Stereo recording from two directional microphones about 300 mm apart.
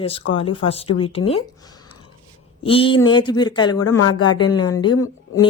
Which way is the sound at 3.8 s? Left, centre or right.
Left.